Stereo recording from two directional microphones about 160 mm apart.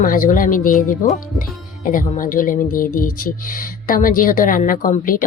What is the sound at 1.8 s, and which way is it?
Speech, 55° left (ahead or behind).